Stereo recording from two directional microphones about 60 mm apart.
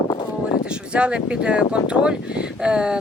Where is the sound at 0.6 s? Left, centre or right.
Centre.